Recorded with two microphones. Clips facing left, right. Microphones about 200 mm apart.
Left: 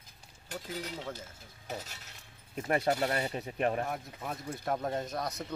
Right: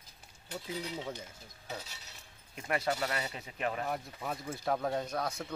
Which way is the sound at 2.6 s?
40° left (ahead or behind).